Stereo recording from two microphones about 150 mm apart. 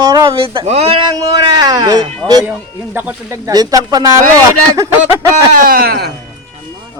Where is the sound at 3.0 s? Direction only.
15° right (ahead or behind).